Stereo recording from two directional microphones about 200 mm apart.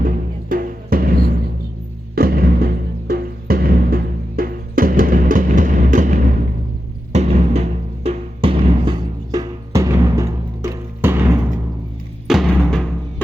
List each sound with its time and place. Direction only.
0.0 s music: 45° right (ahead or behind); by 11.2 s 15° right (ahead or behind)
12.3 s music: centre (ahead or behind)